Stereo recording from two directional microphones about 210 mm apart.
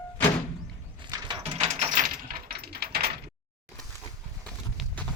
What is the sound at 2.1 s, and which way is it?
Coin, 45° right (ahead or behind).